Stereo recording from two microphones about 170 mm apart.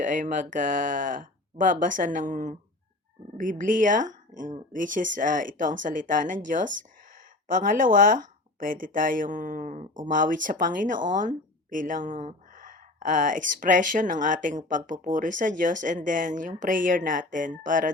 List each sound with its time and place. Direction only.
0.0 s speech: 50° right (ahead or behind)